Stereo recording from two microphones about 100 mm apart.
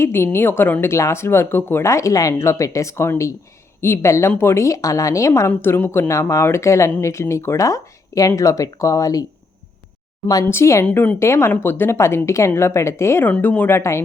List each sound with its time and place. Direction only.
0.0 s speech: 25° left (ahead or behind)
5.5 s speech: 20° left (ahead or behind)
10.4 s speech: 25° left (ahead or behind)
10.8 s a woman's voice: 15° left (ahead or behind)
11.2 s speech: 30° left (ahead or behind)
13.3 s speech: 15° left (ahead or behind)